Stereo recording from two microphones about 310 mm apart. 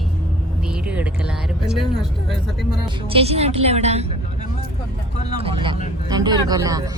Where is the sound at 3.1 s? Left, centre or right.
Centre.